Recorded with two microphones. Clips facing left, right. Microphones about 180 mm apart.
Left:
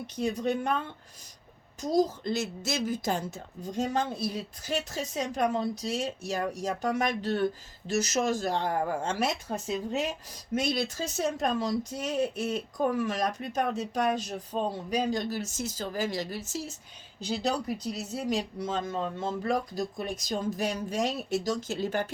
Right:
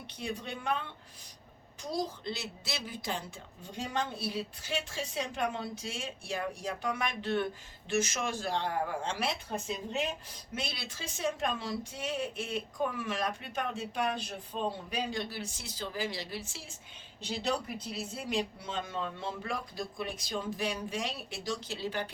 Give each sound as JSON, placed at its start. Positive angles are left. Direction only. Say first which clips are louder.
{"t": 0.1, "sound": "a woman's voice", "louder": "left 10 dB", "side_deg": 45}
{"t": 10.5, "sound": "speech", "louder": "left 11 dB", "side_deg": 45}
{"t": 17.9, "sound": "speech", "louder": "left 1 dB", "side_deg": 40}